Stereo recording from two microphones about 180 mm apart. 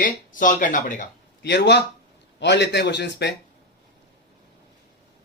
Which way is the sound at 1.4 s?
70° left (ahead or behind).